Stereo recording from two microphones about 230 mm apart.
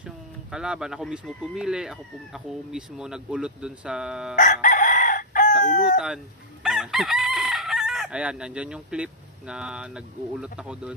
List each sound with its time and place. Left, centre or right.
0.5 s speech: centre
4.4 s crowing: left
6.6 s chicken: centre
9.5 s speech: centre